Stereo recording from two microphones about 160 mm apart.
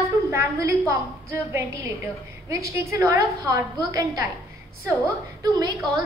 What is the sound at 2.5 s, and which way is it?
A woman's voice, 15° right (ahead or behind).